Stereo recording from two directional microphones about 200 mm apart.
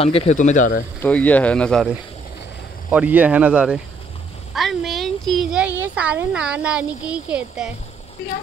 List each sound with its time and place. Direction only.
0.0 s speech: 30° left (ahead or behind)
1.0 s speech: 10° left (ahead or behind)